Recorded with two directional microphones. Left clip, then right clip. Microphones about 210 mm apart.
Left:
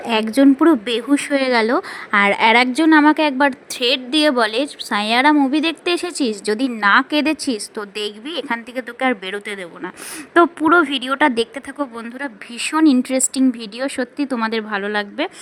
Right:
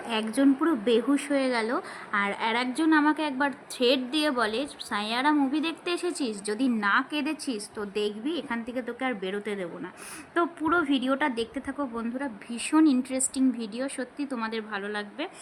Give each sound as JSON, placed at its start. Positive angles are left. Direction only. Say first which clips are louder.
{"t": 0.0, "sound": "a woman's voice", "louder": "left 10 dB", "side_deg": 30}